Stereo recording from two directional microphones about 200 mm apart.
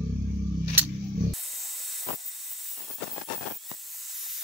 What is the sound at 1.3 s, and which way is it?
Spray, centre (ahead or behind).